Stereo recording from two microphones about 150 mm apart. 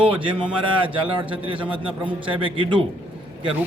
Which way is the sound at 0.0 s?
35° right (ahead or behind).